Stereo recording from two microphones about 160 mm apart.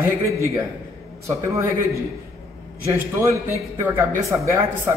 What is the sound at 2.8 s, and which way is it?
Speech, 15° right (ahead or behind).